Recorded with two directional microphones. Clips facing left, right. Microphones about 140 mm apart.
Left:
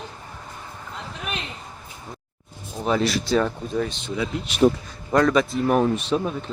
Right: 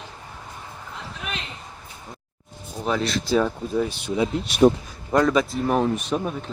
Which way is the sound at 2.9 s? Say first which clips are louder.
Left 2 dB; centre (ahead or behind).